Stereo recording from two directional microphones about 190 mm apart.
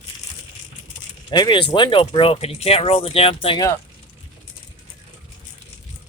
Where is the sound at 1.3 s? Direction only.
25° left (ahead or behind).